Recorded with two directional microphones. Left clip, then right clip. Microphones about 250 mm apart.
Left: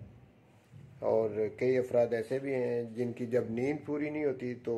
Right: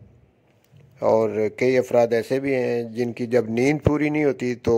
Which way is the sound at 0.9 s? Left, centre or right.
Right.